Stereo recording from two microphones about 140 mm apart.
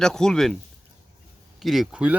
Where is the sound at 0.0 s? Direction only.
5° left (ahead or behind).